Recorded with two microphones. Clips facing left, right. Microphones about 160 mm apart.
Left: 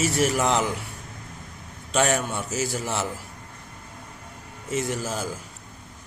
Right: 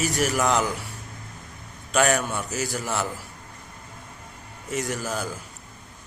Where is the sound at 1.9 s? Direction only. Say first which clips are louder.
Right 1 dB; 25° left (ahead or behind).